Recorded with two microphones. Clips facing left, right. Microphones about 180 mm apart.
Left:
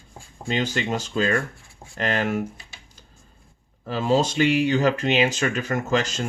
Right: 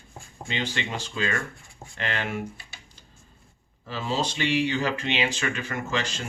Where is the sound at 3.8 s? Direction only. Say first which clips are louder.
Left 7 dB; 50° left (ahead or behind).